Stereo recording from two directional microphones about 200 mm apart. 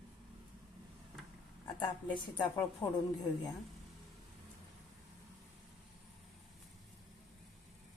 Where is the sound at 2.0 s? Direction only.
20° left (ahead or behind).